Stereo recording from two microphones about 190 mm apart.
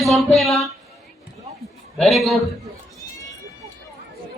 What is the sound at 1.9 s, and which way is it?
Speech, centre (ahead or behind).